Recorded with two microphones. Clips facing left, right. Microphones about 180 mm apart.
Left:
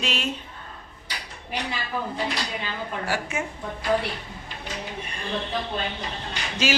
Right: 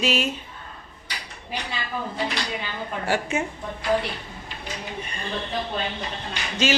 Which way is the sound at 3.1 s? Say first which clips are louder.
Right 5 dB; 25° right (ahead or behind).